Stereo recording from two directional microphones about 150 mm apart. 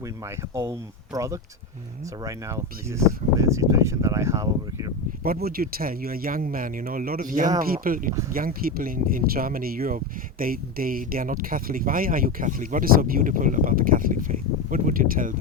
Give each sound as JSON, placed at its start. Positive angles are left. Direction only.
{"t": 0.3, "sound": "speech", "side_deg": -20}
{"t": 5.2, "sound": "speech", "side_deg": -85}